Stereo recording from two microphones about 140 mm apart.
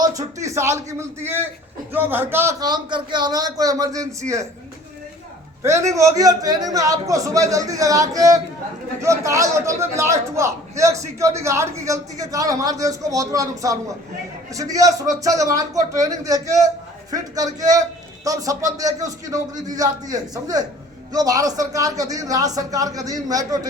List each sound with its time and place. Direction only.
0.0 s a man's voice: 25° right (ahead or behind)
5.6 s a man's voice: 20° right (ahead or behind)